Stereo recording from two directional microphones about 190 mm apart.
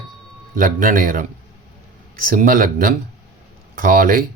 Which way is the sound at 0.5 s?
45° right (ahead or behind).